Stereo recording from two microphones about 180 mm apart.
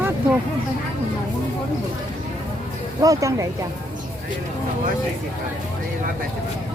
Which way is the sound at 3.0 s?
20° right (ahead or behind).